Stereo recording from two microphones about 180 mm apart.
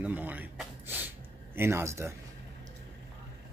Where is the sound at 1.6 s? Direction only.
15° right (ahead or behind).